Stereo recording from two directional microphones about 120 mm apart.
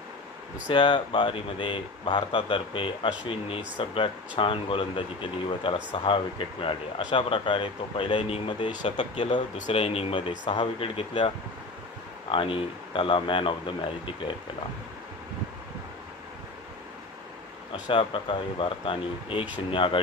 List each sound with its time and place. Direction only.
0.7 s speech: 40° left (ahead or behind)
9.8 s speech: 55° left (ahead or behind)
17.8 s speech: 45° left (ahead or behind)